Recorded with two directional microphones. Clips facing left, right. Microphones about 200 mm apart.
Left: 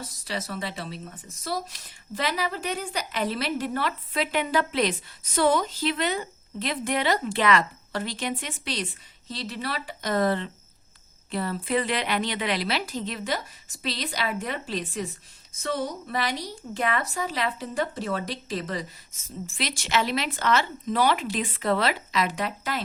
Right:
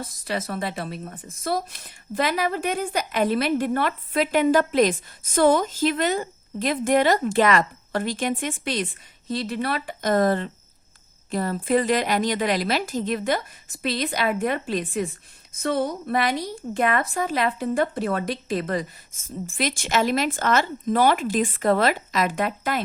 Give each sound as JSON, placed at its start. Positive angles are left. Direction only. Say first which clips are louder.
{"t": 0.3, "sound": "speech", "louder": "right 5 dB", "side_deg": -50}